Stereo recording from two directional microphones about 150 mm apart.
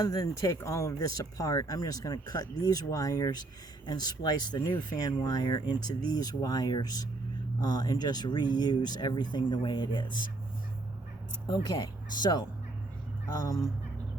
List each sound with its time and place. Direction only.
0.0 s speech: 25° left (ahead or behind)
11.4 s speech: 30° left (ahead or behind)